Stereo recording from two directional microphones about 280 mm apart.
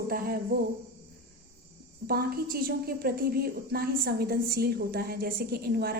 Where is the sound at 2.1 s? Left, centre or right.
Right.